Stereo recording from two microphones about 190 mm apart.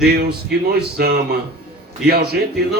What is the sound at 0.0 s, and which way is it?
Speech, 55° right (ahead or behind).